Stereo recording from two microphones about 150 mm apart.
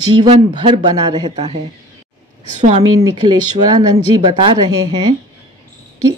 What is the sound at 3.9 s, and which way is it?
Speech, 40° right (ahead or behind).